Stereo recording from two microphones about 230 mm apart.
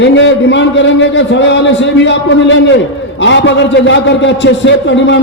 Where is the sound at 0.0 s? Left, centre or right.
Left.